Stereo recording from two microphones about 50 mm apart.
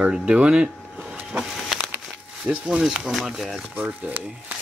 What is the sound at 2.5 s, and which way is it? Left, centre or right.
Speech, centre.